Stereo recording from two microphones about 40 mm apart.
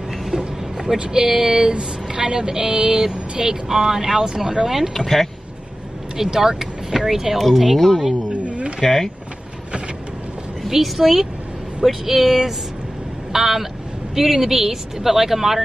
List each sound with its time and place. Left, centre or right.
0.4 s vehicle: centre
1.0 s speech: centre
4.9 s speech: centre
6.1 s speech: centre
8.3 s a sound: right
8.8 s speech: centre
10.7 s speech: centre